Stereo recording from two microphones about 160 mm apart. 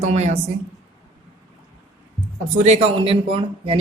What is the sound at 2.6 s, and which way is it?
Speech, 40° right (ahead or behind).